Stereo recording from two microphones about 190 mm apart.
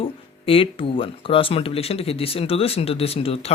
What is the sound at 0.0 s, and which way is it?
Speech, 30° left (ahead or behind).